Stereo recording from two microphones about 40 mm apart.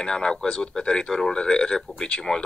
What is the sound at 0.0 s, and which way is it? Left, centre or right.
Speech, centre.